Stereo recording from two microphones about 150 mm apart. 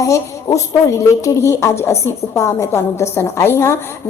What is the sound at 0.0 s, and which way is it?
A woman's voice, 20° left (ahead or behind).